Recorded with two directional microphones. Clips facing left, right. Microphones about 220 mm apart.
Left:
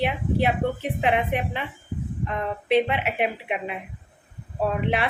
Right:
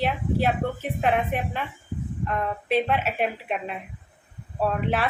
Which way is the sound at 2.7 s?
15° left (ahead or behind).